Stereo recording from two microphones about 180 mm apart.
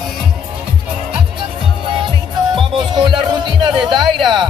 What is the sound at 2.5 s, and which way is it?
Music, 25° right (ahead or behind).